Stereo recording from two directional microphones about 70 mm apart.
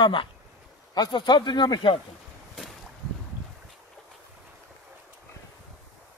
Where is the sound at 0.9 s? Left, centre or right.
Left.